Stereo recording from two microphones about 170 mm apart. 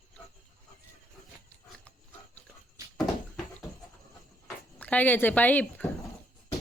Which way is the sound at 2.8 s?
20° right (ahead or behind).